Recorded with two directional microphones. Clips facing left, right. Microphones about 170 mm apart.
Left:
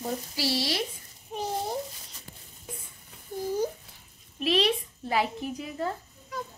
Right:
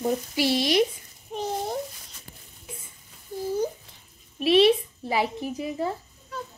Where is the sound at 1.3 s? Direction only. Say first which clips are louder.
Right 2 dB; 10° left (ahead or behind).